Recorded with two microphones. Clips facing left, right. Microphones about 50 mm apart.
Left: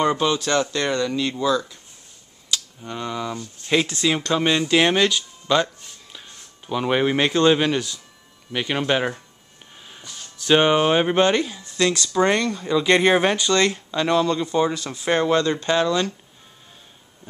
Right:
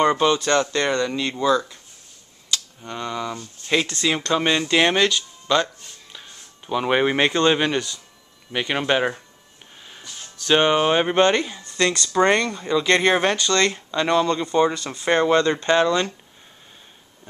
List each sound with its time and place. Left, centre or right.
0.0 s speech: centre
2.5 s speech: centre
9.8 s music: centre
10.3 s speech: centre
13.7 s speech: centre